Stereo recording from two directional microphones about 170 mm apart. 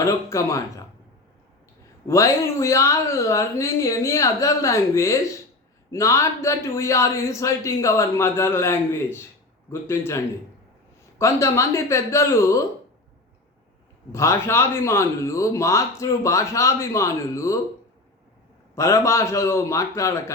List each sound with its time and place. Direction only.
0.0 s speech: 20° left (ahead or behind)
2.0 s a man's voice: 20° left (ahead or behind)
14.1 s a man's voice: 15° left (ahead or behind)
18.7 s a man's voice: 20° left (ahead or behind)